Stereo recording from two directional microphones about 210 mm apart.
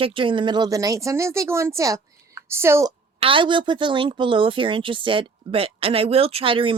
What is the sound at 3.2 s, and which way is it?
A woman's voice, 25° right (ahead or behind).